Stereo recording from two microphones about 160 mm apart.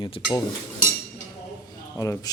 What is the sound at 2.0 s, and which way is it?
Speech, 20° left (ahead or behind).